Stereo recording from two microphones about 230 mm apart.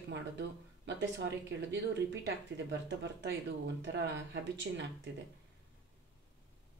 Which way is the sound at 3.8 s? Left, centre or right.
Right.